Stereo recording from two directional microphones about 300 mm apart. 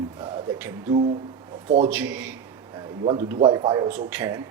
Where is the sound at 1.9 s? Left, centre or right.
Centre.